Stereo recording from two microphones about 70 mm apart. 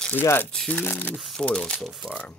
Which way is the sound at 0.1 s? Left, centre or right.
Left.